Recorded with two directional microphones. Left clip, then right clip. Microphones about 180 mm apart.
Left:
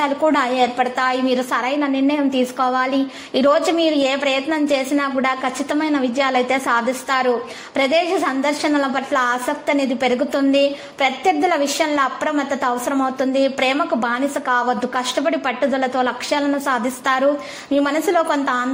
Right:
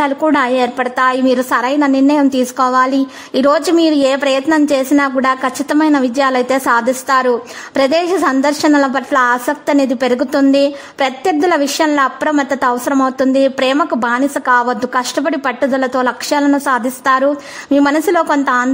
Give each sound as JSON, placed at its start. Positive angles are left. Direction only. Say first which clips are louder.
{"t": 0.0, "sound": "a woman's voice", "louder": "right 4 dB", "side_deg": -30}